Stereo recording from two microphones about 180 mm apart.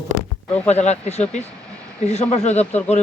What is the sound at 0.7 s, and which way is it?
Speech, 35° left (ahead or behind).